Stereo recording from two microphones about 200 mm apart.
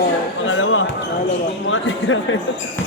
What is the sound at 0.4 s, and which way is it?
Basketball bounce, 75° left (ahead or behind).